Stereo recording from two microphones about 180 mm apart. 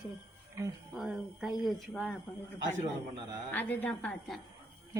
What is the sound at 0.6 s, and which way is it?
Speech, 15° right (ahead or behind).